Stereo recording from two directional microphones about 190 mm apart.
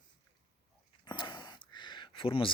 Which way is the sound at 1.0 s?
25° left (ahead or behind).